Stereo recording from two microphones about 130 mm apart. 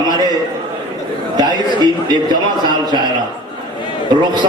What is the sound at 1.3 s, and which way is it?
Speech, 35° right (ahead or behind).